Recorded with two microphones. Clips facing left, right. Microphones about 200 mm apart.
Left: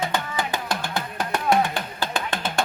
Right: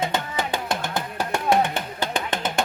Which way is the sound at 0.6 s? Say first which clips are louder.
Right 1 dB; 20° right (ahead or behind).